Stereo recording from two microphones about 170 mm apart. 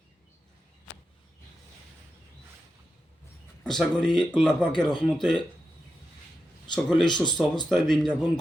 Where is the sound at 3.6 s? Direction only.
5° left (ahead or behind).